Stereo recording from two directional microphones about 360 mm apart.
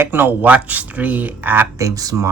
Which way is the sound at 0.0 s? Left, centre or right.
Centre.